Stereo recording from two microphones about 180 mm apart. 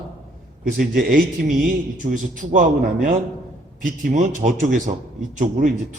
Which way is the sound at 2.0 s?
45° right (ahead or behind).